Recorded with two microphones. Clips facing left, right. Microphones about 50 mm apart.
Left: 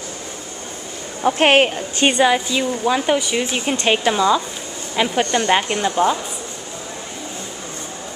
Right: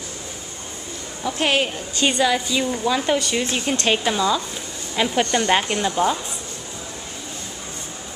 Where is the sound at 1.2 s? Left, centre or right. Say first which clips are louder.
Left 7 dB; left.